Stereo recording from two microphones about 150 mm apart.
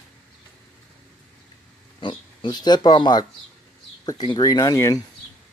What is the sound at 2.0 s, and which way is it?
Speech, 30° left (ahead or behind).